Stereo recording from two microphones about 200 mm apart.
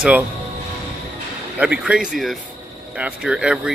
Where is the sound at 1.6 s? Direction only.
5° right (ahead or behind).